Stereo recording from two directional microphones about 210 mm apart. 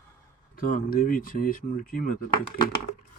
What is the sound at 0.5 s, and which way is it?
Speech, 40° left (ahead or behind).